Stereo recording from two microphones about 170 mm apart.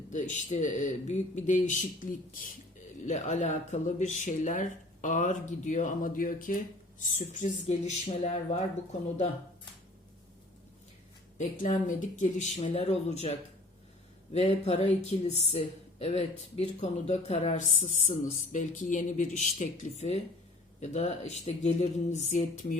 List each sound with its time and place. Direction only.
0.1 s speech: 45° left (ahead or behind)
11.3 s speech: 50° left (ahead or behind)
14.3 s speech: 40° left (ahead or behind)